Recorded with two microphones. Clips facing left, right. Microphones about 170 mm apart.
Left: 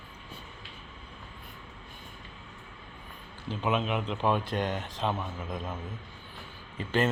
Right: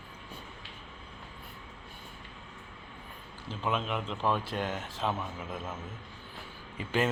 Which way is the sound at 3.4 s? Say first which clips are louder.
Left 3 dB; centre (ahead or behind).